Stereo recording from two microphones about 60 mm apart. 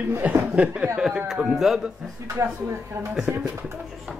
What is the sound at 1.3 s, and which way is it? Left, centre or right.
Speech, centre.